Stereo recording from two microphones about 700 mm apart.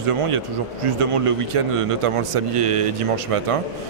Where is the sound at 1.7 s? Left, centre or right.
Right.